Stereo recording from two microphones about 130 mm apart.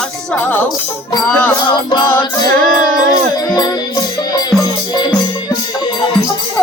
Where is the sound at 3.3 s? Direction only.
30° left (ahead or behind).